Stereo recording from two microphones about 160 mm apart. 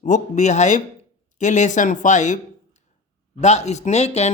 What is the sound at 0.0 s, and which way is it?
Speech, 50° left (ahead or behind).